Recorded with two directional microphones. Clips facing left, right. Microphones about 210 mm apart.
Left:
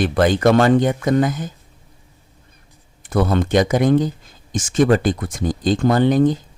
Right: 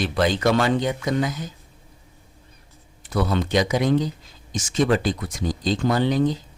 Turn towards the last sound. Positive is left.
turn(degrees=50)  # may be behind; listen again after turning